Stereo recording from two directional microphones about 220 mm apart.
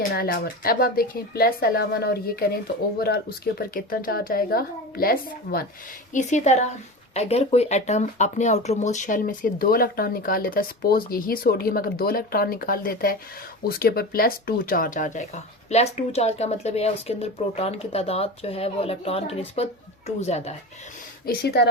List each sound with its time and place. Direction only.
0.1 s a woman's voice: 45° left (ahead or behind)
21.2 s a woman's voice: 45° left (ahead or behind)